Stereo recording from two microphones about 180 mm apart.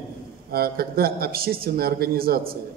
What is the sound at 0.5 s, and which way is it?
A man's voice, 55° right (ahead or behind).